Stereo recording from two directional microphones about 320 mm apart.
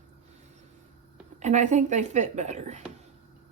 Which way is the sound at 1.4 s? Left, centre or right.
Right.